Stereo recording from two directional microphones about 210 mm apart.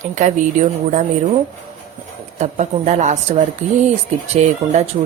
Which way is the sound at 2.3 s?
35° right (ahead or behind).